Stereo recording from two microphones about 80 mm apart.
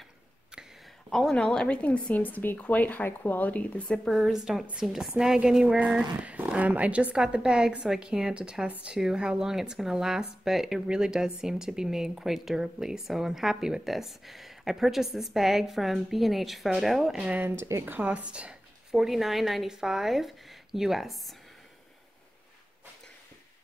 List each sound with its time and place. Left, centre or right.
1.1 s speech: centre
4.0 s speech: centre
17.2 s speech: right
17.8 s speech: centre